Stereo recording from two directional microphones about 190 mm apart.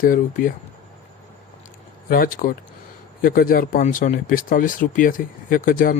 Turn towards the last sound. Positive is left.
turn(degrees=50)  # may be behind; listen again after turning